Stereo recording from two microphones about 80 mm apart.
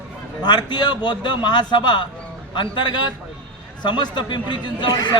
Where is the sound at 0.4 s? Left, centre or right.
Left.